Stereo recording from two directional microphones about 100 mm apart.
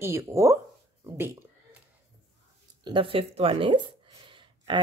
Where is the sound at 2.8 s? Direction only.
55° right (ahead or behind).